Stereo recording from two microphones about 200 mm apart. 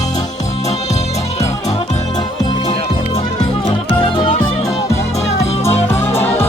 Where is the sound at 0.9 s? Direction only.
35° left (ahead or behind).